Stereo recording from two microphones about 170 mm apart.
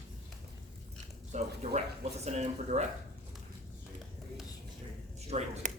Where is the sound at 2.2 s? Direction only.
40° right (ahead or behind).